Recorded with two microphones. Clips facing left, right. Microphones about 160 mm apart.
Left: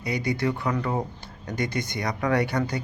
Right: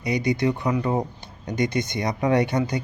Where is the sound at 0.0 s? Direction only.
20° right (ahead or behind).